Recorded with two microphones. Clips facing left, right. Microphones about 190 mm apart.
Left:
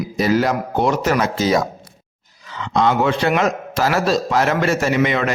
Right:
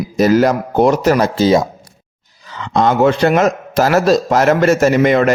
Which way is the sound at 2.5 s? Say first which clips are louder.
Right 4 dB; 50° right (ahead or behind).